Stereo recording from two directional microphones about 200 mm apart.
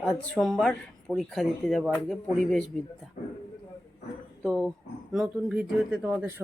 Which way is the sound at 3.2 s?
35° left (ahead or behind).